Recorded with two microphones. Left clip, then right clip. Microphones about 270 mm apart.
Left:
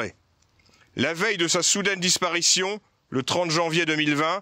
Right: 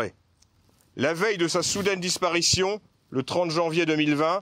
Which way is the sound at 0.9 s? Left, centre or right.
Left.